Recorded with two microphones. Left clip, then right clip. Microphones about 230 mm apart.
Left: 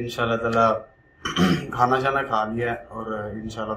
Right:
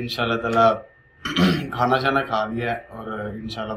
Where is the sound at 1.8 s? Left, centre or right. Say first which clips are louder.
Even; centre.